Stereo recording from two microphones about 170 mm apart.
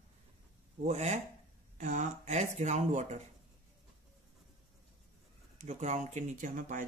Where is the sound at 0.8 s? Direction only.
45° right (ahead or behind).